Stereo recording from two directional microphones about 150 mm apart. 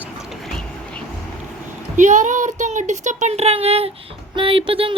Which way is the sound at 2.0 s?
55° right (ahead or behind).